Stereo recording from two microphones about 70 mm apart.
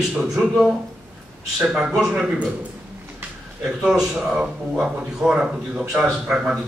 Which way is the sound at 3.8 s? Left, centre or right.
Centre.